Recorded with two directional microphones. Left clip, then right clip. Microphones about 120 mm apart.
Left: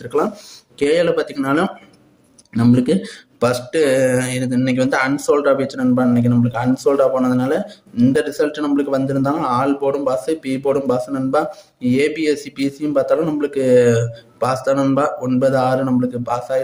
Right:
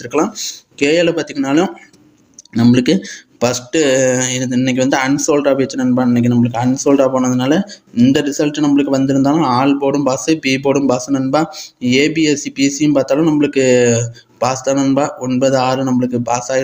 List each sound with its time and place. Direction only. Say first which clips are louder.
0.0 s speech: right 3 dB; 20° right (ahead or behind)